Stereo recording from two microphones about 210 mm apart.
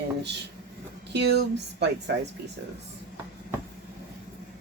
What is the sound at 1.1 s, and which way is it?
Speech, 55° right (ahead or behind).